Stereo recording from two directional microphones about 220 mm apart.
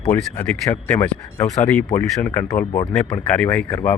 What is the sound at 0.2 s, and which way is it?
Speech, 10° left (ahead or behind).